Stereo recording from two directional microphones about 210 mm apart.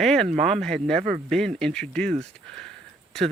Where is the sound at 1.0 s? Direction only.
35° right (ahead or behind).